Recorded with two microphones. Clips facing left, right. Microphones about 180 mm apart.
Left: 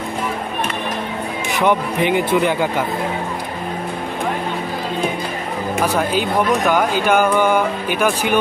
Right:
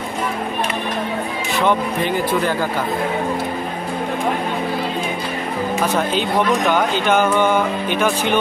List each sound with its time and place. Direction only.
1.5 s speech: 15° left (ahead or behind)
6.7 s speech: 5° left (ahead or behind)